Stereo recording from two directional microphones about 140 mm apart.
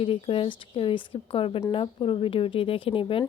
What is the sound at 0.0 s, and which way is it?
Speech, 40° left (ahead or behind).